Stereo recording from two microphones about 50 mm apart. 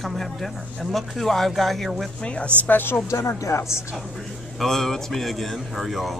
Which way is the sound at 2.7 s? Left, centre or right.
Left.